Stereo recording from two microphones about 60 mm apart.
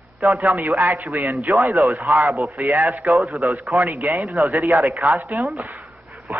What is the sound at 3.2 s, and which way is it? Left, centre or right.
Speech, centre.